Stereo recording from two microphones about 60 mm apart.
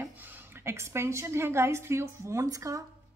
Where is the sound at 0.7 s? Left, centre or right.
Right.